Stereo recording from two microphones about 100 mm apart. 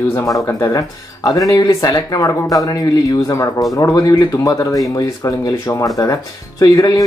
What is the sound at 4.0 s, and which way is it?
Speech, 35° left (ahead or behind).